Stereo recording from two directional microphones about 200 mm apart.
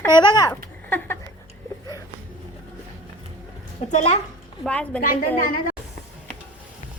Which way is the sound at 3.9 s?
35° left (ahead or behind).